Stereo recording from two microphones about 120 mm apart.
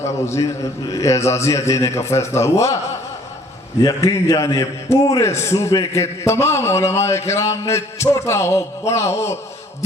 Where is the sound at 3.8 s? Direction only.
25° left (ahead or behind).